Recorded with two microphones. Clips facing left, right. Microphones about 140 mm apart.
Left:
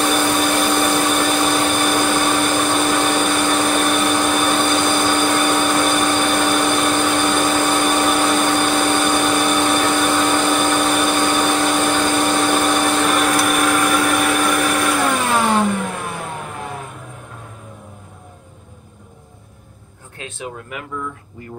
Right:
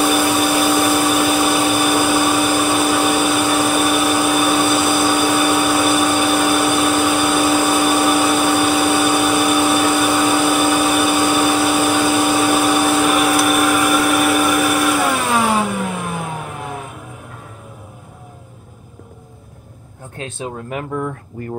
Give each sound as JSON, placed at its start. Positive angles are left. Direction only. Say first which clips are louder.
{"t": 0.0, "sound": "vacuum cleaner", "louder": "right 2 dB", "side_deg": -5}
{"t": 20.3, "sound": "a sound", "louder": "right 4 dB", "side_deg": -30}
{"t": 21.4, "sound": "speech", "louder": "right 8 dB", "side_deg": -50}